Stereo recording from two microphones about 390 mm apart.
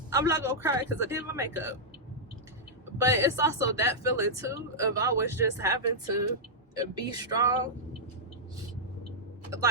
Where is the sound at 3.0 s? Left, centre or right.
Centre.